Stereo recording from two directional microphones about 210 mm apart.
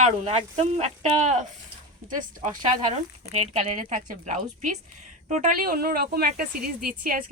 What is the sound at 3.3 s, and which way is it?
A woman's voice, 30° right (ahead or behind).